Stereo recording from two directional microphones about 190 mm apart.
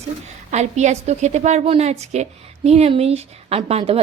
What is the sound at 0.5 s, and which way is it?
A woman's voice, 35° right (ahead or behind).